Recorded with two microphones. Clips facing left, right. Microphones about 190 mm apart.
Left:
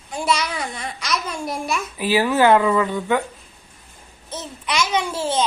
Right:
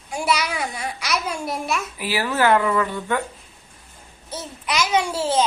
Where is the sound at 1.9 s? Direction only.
20° left (ahead or behind).